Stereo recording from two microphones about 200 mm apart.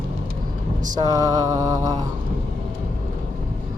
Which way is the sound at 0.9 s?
20° right (ahead or behind).